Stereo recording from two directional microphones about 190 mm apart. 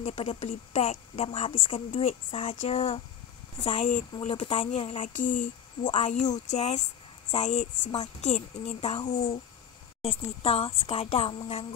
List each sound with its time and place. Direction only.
0.0 s speech: 30° left (ahead or behind)
10.4 s speech: 30° left (ahead or behind)